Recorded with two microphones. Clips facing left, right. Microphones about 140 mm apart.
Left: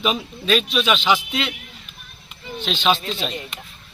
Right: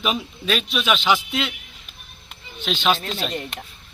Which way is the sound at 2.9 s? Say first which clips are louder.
Left 1 dB; 50° right (ahead or behind).